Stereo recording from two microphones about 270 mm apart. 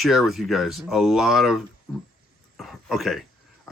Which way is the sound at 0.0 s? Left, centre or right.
Centre.